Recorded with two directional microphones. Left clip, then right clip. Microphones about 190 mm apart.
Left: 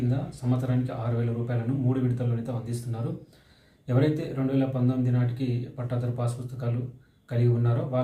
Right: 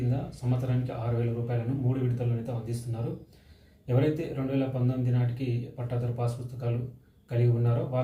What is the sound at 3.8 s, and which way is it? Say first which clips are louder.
A man's voice: left 2 dB; 15° left (ahead or behind).